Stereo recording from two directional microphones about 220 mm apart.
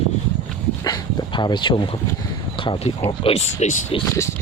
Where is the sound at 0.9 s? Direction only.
20° left (ahead or behind).